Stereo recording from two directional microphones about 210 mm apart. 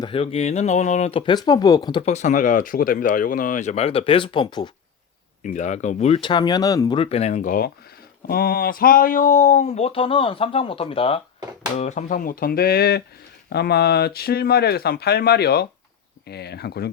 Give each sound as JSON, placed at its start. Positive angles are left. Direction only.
{"t": 0.0, "sound": "speech", "side_deg": 25}
{"t": 5.4, "sound": "speech", "side_deg": 35}